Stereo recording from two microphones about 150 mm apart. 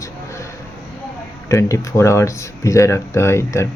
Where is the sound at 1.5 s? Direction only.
20° left (ahead or behind).